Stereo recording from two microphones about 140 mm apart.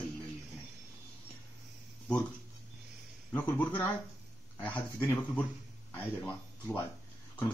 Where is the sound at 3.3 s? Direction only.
10° left (ahead or behind).